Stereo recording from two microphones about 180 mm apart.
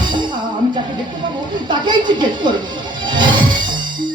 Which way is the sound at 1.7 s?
25° right (ahead or behind).